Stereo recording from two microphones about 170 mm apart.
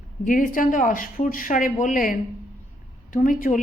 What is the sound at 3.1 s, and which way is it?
Speech, 55° left (ahead or behind).